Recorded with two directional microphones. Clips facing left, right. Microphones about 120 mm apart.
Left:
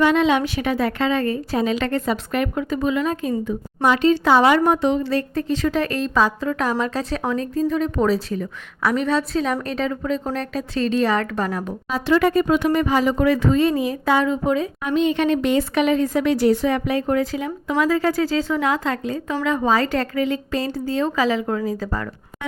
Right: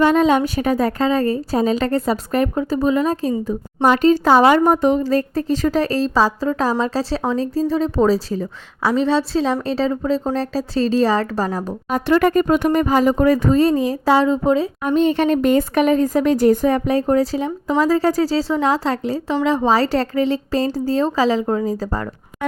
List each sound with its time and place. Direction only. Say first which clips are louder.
0.0 s speech: right 3 dB; 40° right (ahead or behind)
11.9 s speech: right 2 dB; 50° right (ahead or behind)